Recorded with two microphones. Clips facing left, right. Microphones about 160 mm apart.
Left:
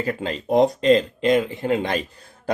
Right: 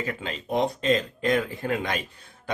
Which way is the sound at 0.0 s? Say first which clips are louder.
Left 6 dB; 35° left (ahead or behind).